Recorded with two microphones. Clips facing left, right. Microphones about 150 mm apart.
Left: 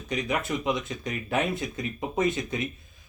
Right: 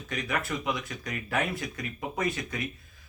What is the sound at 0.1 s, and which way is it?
Speech, 20° left (ahead or behind).